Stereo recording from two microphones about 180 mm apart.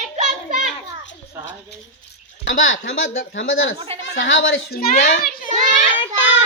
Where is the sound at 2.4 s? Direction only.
90° left.